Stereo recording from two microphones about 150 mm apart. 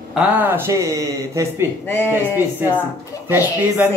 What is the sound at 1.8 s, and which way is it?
Speech, 15° left (ahead or behind).